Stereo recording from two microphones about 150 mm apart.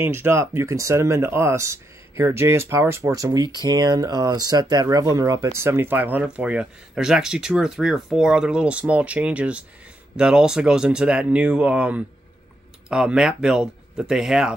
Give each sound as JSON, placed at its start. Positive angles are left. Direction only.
{"t": 0.0, "sound": "speech", "side_deg": -15}